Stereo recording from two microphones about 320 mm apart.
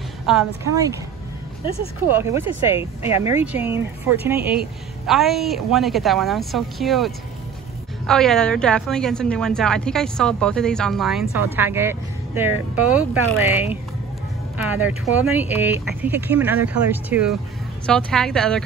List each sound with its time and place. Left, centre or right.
0.3 s speech: centre
2.0 s speech: centre
2.8 s speech: centre
3.3 s speech: centre